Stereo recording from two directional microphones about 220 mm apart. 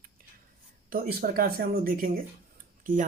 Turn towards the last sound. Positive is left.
turn(degrees=-40)  # may be behind; listen again after turning